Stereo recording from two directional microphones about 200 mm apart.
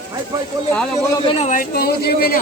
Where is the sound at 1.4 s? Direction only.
40° left (ahead or behind).